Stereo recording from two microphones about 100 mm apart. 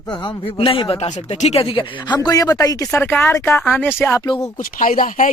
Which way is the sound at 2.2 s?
40° left (ahead or behind).